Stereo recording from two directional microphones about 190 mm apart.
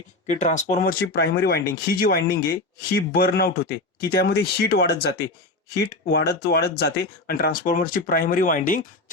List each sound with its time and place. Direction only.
0.3 s speech: 40° left (ahead or behind)